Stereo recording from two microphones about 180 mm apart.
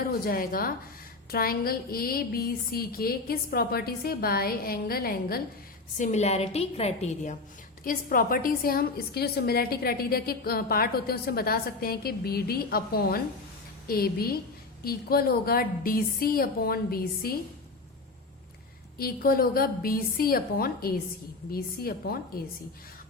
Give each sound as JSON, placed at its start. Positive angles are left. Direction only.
{"t": 0.1, "sound": "a woman's voice", "side_deg": 55}
{"t": 6.0, "sound": "a woman's voice", "side_deg": 40}
{"t": 7.9, "sound": "a woman's voice", "side_deg": 50}
{"t": 18.9, "sound": "a woman's voice", "side_deg": 55}